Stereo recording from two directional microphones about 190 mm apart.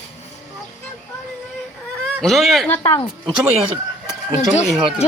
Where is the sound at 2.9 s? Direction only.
30° left (ahead or behind).